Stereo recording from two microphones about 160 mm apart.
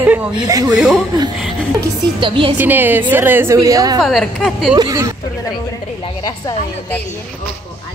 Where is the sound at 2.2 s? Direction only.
30° right (ahead or behind).